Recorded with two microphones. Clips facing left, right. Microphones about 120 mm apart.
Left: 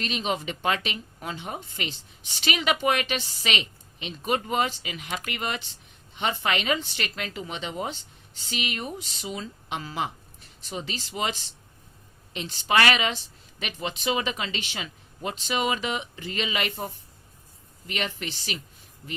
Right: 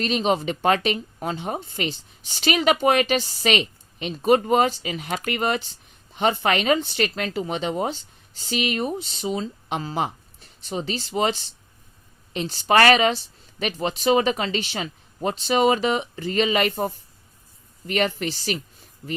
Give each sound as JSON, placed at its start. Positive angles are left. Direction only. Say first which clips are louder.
{"t": 0.0, "sound": "speech", "louder": "right 7 dB", "side_deg": -40}